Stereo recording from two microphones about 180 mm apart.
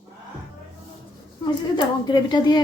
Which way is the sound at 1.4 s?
25° left (ahead or behind).